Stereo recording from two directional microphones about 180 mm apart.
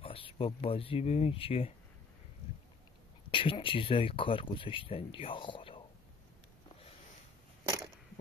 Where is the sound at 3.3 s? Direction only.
30° left (ahead or behind).